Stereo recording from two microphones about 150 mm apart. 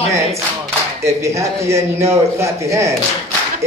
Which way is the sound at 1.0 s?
20° right (ahead or behind).